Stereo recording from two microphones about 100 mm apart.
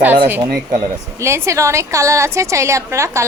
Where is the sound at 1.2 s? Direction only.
30° right (ahead or behind).